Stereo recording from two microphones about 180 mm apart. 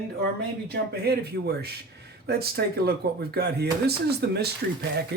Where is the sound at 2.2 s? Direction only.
60° right (ahead or behind).